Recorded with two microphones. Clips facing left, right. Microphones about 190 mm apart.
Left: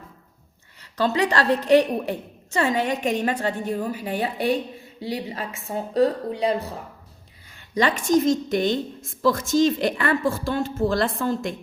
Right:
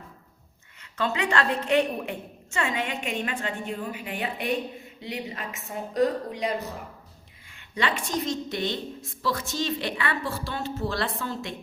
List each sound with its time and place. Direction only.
0.8 s a woman's voice: 35° left (ahead or behind)